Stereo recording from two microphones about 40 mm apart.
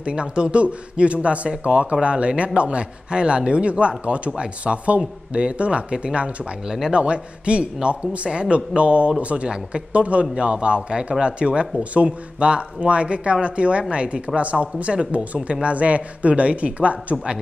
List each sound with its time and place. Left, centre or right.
0.0 s speech: right